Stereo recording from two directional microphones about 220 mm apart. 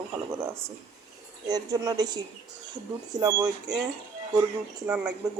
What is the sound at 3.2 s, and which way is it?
Speech, 15° right (ahead or behind).